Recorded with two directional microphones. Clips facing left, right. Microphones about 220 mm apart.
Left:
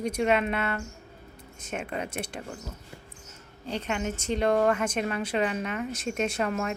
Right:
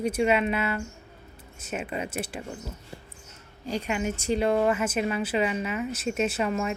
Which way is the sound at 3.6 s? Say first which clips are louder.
Right 2 dB; 10° right (ahead or behind).